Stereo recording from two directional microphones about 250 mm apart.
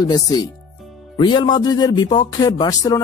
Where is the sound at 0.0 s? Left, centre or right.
Centre.